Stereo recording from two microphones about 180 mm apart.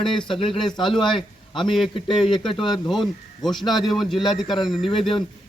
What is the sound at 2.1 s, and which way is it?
A man's voice, centre (ahead or behind).